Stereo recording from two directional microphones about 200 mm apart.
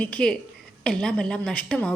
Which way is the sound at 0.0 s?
5° left (ahead or behind).